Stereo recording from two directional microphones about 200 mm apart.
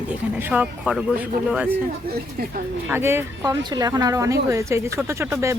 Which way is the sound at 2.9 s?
10° right (ahead or behind).